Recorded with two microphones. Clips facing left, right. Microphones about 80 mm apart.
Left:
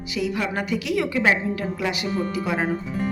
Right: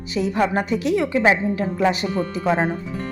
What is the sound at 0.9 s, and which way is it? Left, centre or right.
Music, right.